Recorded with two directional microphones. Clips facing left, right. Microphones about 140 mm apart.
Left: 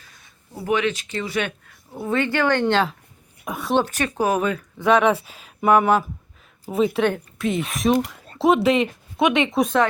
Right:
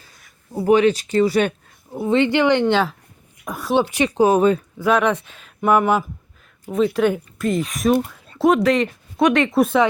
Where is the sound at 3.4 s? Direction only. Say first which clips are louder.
Right 1 dB; centre (ahead or behind).